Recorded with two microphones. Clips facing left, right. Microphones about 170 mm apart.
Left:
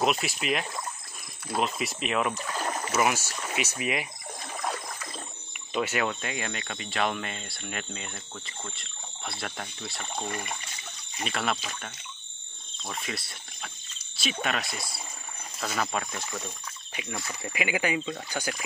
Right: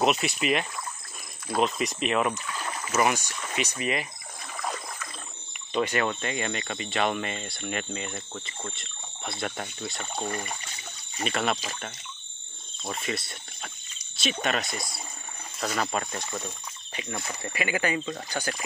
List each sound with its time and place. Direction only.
0.0 s speech: centre (ahead or behind)
2.3 s a sound: 40° left (ahead or behind)
2.9 s speech: 5° left (ahead or behind)
5.7 s speech: 5° left (ahead or behind)
11.2 s speech: centre (ahead or behind)
12.9 s speech: centre (ahead or behind)